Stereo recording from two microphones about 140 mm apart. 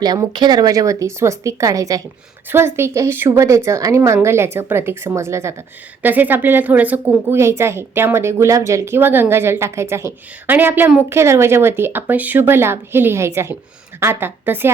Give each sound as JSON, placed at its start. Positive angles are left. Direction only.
{"t": 0.0, "sound": "a woman's voice", "side_deg": -30}